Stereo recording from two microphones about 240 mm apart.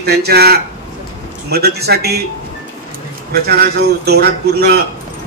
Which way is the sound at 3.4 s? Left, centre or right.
Right.